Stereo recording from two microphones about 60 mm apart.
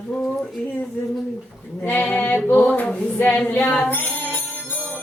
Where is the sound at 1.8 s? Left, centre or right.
Left.